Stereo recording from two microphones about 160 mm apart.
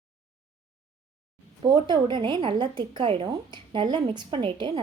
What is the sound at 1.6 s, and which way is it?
A woman's voice, 25° right (ahead or behind).